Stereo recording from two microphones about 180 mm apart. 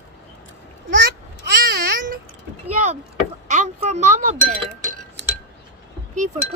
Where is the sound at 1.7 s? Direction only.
55° right (ahead or behind).